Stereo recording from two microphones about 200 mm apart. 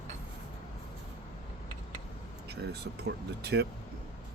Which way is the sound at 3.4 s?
55° right (ahead or behind).